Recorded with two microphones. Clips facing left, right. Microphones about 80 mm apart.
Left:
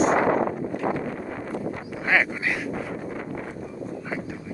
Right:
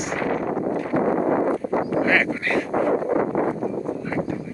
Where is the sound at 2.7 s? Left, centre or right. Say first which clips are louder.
Right 11 dB; right.